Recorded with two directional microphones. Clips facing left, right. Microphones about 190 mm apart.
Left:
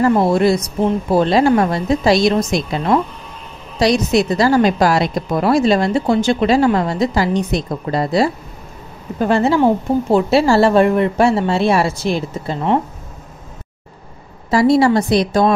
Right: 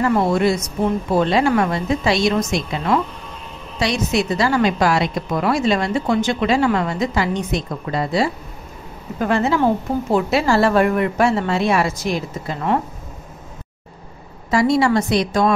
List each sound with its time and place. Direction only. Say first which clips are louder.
0.0 s a woman's voice: left 3 dB; 35° left (ahead or behind)
14.5 s a woman's voice: left 4 dB; 35° left (ahead or behind)